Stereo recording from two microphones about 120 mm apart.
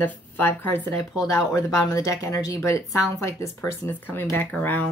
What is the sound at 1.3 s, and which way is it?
Speech, 25° left (ahead or behind).